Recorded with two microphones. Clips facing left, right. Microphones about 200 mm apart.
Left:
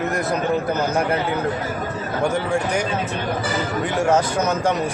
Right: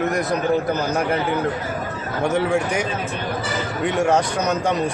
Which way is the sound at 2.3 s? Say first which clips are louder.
Right 1 dB; centre (ahead or behind).